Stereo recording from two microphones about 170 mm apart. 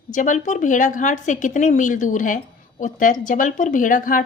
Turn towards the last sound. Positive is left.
turn(degrees=50)  # may be behind; listen again after turning